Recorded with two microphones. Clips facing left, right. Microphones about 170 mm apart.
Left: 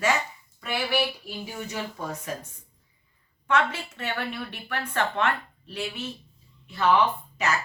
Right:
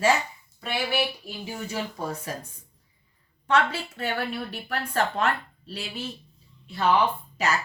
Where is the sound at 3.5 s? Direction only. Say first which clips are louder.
Right 1 dB; 35° right (ahead or behind).